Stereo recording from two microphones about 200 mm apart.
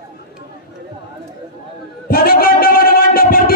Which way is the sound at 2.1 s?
45° left (ahead or behind).